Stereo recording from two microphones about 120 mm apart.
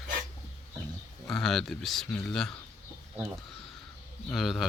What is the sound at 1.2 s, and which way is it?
Speech, centre (ahead or behind).